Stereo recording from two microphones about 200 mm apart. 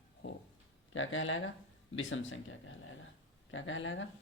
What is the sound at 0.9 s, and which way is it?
Speech, 75° left (ahead or behind).